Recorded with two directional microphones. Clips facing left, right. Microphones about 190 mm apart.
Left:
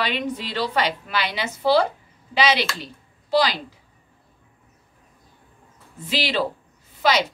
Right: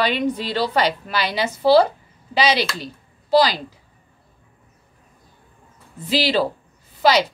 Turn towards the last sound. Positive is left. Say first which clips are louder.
# right 4 dB
turn(degrees=-35)  # may be behind; listen again after turning